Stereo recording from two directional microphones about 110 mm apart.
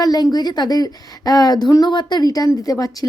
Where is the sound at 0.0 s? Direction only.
35° left (ahead or behind).